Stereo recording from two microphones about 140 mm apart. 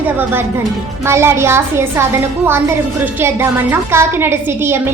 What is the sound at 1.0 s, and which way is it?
A woman's voice, 20° right (ahead or behind).